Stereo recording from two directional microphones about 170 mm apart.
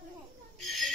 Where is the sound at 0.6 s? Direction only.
Centre (ahead or behind).